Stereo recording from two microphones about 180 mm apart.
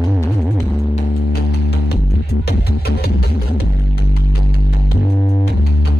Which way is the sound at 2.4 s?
60° left (ahead or behind).